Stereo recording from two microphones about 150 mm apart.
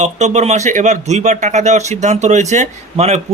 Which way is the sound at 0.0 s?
50° right (ahead or behind).